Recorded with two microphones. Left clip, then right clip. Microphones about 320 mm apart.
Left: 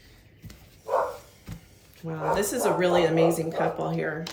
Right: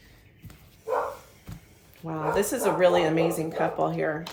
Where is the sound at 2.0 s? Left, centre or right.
Centre.